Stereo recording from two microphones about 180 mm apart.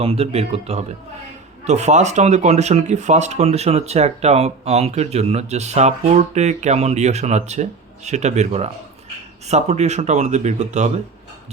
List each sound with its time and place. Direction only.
0.0 s speech: 35° right (ahead or behind)